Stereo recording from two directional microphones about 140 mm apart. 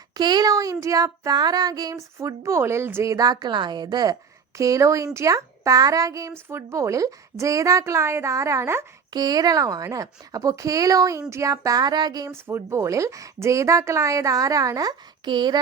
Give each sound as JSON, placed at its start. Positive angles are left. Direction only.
{"t": 0.2, "sound": "child singing", "side_deg": -30}